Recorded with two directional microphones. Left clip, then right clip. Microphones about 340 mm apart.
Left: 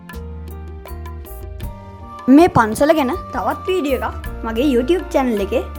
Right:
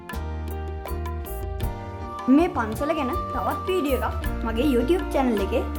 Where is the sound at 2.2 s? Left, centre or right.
Left.